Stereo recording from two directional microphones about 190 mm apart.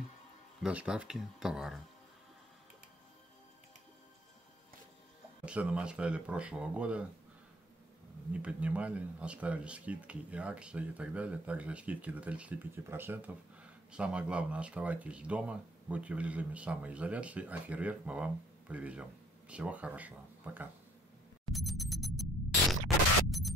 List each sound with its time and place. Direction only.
0.6 s speech: 5° right (ahead or behind)
5.4 s speech: 5° right (ahead or behind)
8.3 s speech: 5° right (ahead or behind)
21.5 s a sound: centre (ahead or behind)